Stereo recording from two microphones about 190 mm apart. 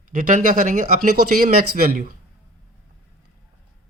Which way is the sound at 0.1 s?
45° right (ahead or behind).